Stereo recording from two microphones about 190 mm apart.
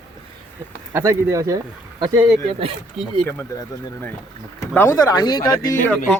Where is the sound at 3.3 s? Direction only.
15° left (ahead or behind).